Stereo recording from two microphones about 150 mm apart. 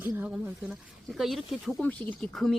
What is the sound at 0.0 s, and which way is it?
Speech, 15° right (ahead or behind).